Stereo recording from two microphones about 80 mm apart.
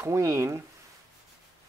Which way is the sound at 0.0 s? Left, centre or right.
Right.